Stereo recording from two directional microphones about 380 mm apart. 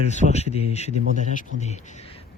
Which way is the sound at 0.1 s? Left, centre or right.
Centre.